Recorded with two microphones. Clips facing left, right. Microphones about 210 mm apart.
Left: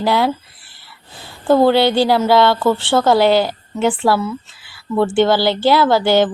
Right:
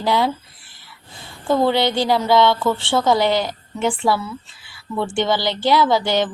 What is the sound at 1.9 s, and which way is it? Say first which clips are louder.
Speech: left 4 dB; 5° left (ahead or behind).